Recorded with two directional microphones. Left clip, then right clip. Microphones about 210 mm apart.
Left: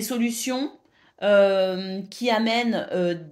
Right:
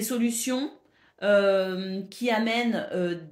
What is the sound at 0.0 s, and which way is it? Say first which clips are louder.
Speech: left 2 dB; 35° left (ahead or behind).